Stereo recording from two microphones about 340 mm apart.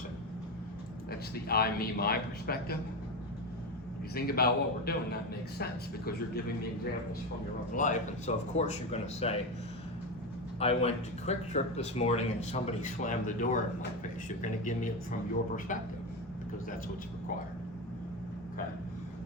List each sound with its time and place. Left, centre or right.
1.5 s speech: left
4.1 s speech: left
7.8 s speech: left
10.6 s speech: centre